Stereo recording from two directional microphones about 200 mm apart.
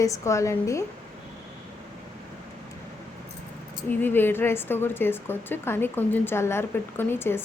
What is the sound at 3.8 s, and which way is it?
A woman's voice, 10° left (ahead or behind).